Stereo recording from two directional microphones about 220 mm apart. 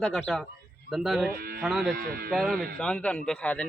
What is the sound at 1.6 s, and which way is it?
Speech, centre (ahead or behind).